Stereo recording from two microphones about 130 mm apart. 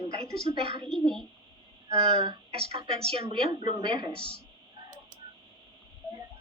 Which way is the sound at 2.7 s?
50° right (ahead or behind).